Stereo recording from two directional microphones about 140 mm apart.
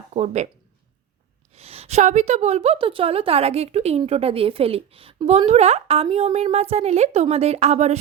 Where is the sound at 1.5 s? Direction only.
45° right (ahead or behind).